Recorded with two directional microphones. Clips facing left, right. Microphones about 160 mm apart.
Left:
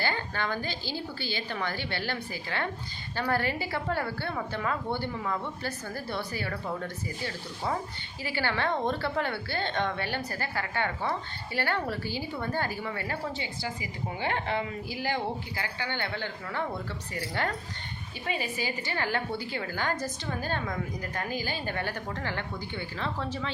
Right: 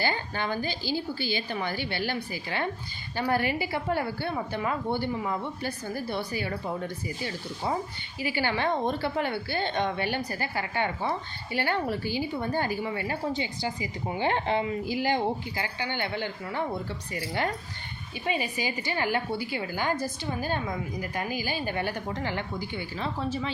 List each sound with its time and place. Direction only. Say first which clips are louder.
0.0 s a woman's voice: right 2 dB; 15° right (ahead or behind)
8.2 s a woman's voice: right 2 dB; 15° right (ahead or behind)